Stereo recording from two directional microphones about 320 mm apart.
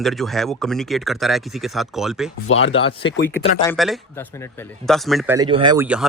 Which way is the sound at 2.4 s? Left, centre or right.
Left.